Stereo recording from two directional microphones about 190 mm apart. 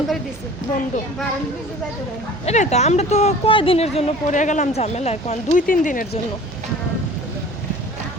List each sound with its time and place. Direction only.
2.5 s a woman's voice: 35° left (ahead or behind)